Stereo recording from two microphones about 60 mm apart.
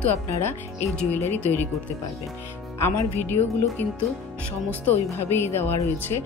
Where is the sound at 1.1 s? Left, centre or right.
Left.